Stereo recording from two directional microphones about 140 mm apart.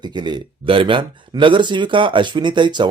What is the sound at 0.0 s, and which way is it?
Speech, 30° right (ahead or behind).